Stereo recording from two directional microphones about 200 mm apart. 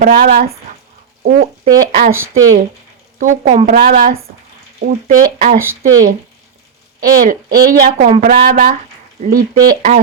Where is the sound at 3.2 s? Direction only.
40° right (ahead or behind).